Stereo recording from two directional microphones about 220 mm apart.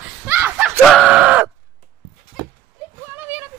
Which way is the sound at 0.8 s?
5° left (ahead or behind).